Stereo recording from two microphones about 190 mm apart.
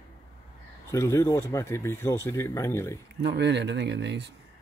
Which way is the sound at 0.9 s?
15° left (ahead or behind).